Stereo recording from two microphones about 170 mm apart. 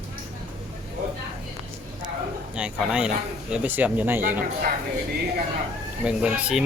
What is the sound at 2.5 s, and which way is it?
Speech, 5° right (ahead or behind).